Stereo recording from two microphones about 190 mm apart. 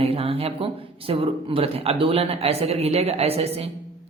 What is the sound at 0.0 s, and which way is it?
Speech, 30° right (ahead or behind).